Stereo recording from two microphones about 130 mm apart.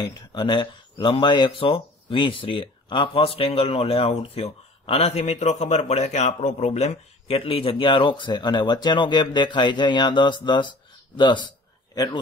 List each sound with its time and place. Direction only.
0.0 s speech: 35° left (ahead or behind)
5.2 s a man's voice: 60° left (ahead or behind); by 12.2 s 30° left (ahead or behind)